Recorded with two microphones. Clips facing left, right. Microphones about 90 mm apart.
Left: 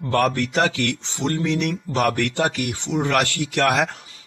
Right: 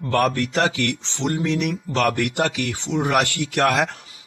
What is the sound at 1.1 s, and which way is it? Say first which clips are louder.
Speech: even; 15° right (ahead or behind).